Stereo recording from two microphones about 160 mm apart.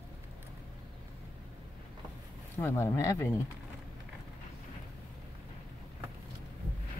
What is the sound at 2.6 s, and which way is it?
Speech, 15° left (ahead or behind).